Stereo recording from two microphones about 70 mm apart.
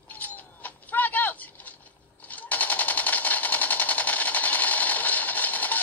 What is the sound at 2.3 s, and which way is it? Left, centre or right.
Machine gun, left.